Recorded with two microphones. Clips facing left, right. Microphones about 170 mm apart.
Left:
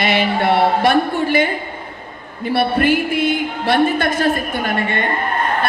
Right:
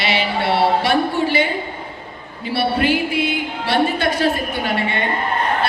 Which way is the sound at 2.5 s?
50° left (ahead or behind).